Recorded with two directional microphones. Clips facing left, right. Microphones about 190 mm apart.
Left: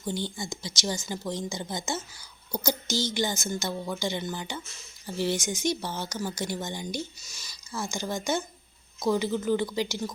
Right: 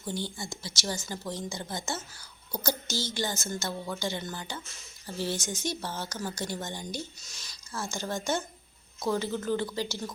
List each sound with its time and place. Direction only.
0.3 s a woman's voice: 15° left (ahead or behind)
7.2 s a woman's voice: centre (ahead or behind)